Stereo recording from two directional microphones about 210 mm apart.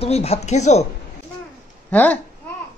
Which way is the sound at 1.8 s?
10° left (ahead or behind).